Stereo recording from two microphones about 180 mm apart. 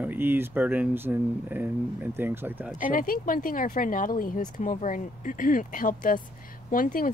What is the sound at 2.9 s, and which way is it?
A woman's voice, 50° left (ahead or behind).